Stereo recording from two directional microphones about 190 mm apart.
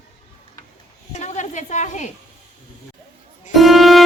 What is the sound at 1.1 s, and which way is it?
A woman's voice, 35° left (ahead or behind).